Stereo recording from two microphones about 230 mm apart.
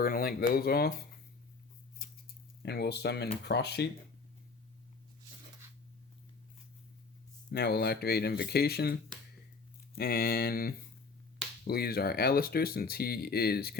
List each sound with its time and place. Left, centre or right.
0.0 s speech: left
2.6 s speech: left
7.5 s speech: left